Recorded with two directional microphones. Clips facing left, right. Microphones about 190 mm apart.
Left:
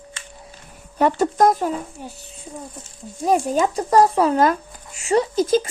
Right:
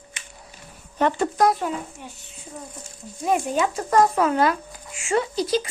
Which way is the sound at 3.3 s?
35° left (ahead or behind).